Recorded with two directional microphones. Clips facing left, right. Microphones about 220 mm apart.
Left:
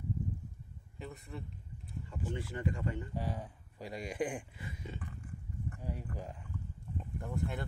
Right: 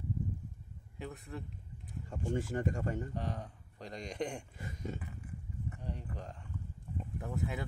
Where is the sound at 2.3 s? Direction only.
45° right (ahead or behind).